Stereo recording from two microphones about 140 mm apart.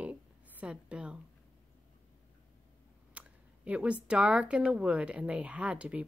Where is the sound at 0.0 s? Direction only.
10° right (ahead or behind).